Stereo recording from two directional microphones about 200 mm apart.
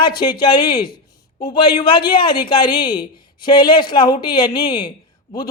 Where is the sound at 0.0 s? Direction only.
20° left (ahead or behind).